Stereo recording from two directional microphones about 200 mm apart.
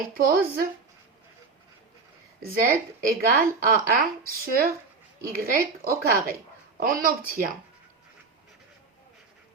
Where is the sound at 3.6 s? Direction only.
45° right (ahead or behind).